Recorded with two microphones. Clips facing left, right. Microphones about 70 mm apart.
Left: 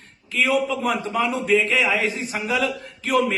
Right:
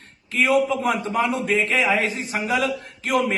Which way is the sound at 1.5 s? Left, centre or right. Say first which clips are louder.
Left 1 dB; right.